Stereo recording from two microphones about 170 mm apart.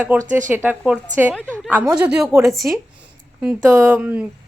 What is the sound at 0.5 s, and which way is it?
Speech, 10° right (ahead or behind).